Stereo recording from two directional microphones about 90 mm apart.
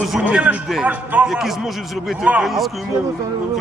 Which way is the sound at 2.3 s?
15° right (ahead or behind).